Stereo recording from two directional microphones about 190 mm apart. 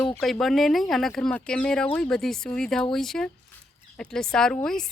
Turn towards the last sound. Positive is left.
turn(degrees=5)  # may be behind; listen again after turning